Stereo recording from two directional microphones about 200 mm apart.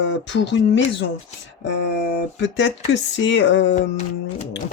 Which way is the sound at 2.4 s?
65° left (ahead or behind).